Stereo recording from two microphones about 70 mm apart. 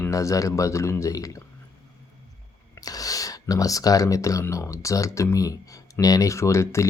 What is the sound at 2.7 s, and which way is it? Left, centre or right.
Speech, left.